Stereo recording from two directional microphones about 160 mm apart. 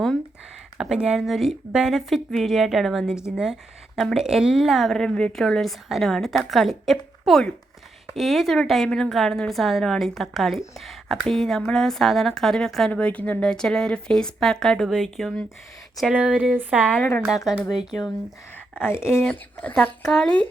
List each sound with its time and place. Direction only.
0.8 s a woman's voice: 5° right (ahead or behind)
17.0 s speech: 10° left (ahead or behind)
17.2 s a woman's voice: 5° right (ahead or behind)
18.9 s a woman's voice: 15° left (ahead or behind)